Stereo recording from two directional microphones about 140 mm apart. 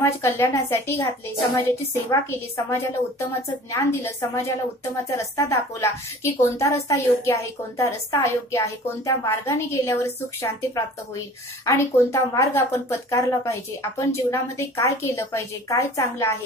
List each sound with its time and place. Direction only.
0.0 s a woman's voice: 20° left (ahead or behind)